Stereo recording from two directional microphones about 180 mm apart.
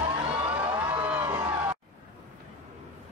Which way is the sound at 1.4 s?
10° right (ahead or behind).